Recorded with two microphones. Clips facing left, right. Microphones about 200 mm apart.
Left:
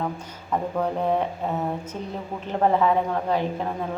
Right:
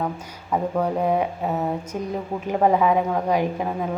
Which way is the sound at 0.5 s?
10° right (ahead or behind).